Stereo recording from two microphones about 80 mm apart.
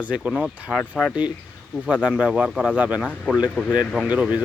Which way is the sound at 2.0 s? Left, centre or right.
Centre.